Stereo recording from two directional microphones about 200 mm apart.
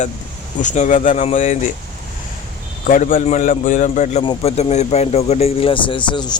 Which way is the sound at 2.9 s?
40° left (ahead or behind).